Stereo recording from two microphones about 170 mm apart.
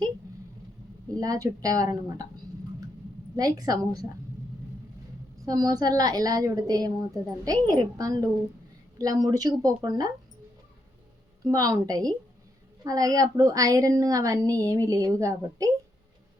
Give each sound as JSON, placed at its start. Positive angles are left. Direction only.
{"t": 1.1, "sound": "a woman's voice", "side_deg": -20}
{"t": 3.3, "sound": "a woman's voice", "side_deg": -20}
{"t": 5.5, "sound": "a woman's voice", "side_deg": -20}
{"t": 11.4, "sound": "a woman's voice", "side_deg": -20}